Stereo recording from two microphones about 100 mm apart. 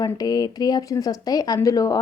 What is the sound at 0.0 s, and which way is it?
Speech, 40° left (ahead or behind).